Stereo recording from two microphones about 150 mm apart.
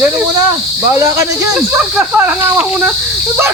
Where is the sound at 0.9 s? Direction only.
20° right (ahead or behind).